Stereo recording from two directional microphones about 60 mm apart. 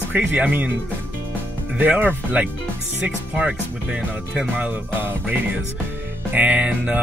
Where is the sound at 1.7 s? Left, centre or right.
Right.